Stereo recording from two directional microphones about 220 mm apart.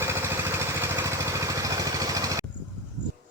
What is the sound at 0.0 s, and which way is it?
Vehicle, 10° right (ahead or behind).